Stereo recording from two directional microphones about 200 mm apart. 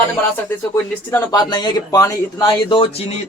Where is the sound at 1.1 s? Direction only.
20° left (ahead or behind).